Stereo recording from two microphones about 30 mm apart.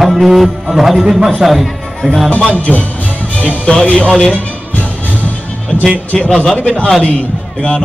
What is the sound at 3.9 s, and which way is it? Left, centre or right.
Speech, left.